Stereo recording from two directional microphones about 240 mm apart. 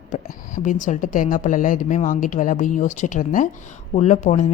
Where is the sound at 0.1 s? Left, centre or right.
Left.